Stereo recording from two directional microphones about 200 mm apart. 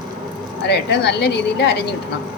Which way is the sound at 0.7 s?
55° left (ahead or behind).